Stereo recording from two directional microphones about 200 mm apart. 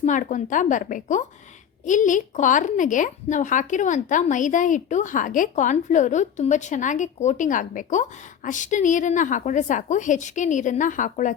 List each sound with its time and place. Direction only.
0.0 s a woman's voice: 40° left (ahead or behind)